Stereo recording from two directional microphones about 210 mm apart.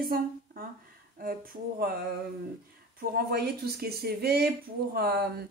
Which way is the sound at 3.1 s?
45° right (ahead or behind).